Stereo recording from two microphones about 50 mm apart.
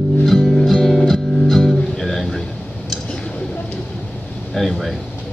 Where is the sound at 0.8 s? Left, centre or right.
Centre.